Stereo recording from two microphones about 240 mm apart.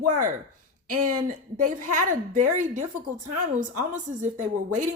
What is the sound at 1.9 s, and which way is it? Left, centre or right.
Speech, right.